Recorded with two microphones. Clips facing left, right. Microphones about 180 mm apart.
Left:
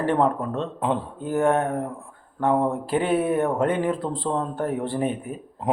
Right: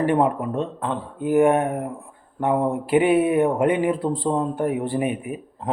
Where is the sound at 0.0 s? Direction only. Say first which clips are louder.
Right 2 dB; 15° right (ahead or behind).